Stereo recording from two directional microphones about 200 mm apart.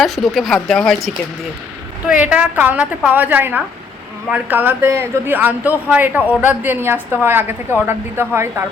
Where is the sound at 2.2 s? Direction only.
10° right (ahead or behind).